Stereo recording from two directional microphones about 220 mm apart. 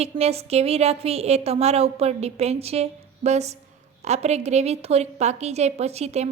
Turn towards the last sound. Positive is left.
turn(degrees=-30)  # may be behind; listen again after turning